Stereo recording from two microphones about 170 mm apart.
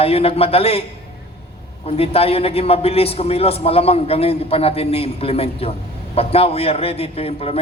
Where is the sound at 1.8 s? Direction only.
35° left (ahead or behind).